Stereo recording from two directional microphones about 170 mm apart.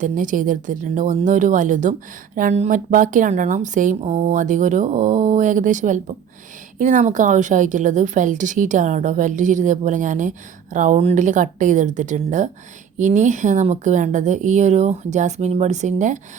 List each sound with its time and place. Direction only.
0.0 s speech: 50° right (ahead or behind)